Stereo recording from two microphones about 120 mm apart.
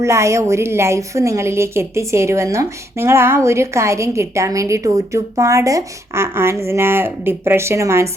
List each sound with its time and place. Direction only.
0.0 s a woman's voice: 25° right (ahead or behind)